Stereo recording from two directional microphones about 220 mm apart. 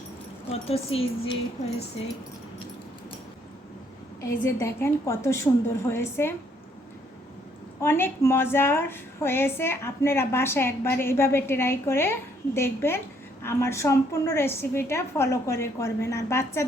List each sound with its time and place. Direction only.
0.5 s speech: 25° left (ahead or behind)
4.2 s a woman's voice: 10° left (ahead or behind)
7.8 s a woman's voice: 10° left (ahead or behind)